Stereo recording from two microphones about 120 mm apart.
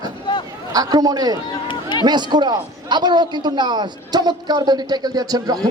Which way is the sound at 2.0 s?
35° right (ahead or behind).